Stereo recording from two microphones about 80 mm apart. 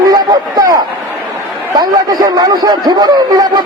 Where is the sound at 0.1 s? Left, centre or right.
Right.